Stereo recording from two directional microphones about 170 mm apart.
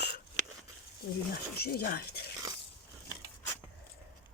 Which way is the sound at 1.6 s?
65° left (ahead or behind).